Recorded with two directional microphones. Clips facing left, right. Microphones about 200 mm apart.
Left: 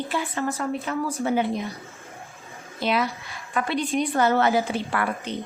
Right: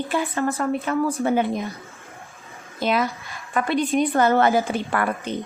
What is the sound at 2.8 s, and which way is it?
Speech, 45° right (ahead or behind).